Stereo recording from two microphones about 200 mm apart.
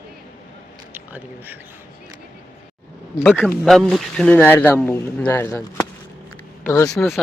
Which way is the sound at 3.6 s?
Centre (ahead or behind).